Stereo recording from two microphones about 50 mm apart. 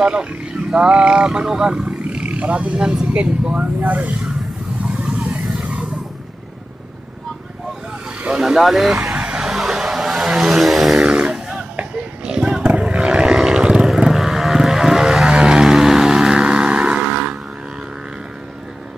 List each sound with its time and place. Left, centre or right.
0.0 s speech: centre
2.7 s speech: centre; by 4.1 s right
4.8 s vehicle: right
8.3 s speech: centre
8.5 s speech: centre
9.1 s vehicle: right
9.4 s a sound: centre
11.0 s vehicle: centre
11.9 s a sound: centre
12.6 s vehicle: right
15.2 s vehicle: centre